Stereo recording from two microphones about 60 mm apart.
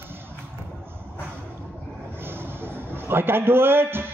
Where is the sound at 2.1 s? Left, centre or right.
Right.